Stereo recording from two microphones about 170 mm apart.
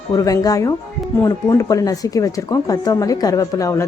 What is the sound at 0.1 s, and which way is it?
Speech, 20° left (ahead or behind).